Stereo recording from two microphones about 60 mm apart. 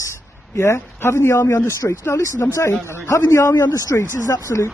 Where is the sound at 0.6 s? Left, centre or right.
Left.